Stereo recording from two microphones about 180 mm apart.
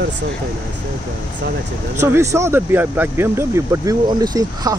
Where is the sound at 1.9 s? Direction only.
15° right (ahead or behind).